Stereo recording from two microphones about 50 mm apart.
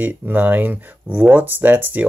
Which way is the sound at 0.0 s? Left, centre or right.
Right.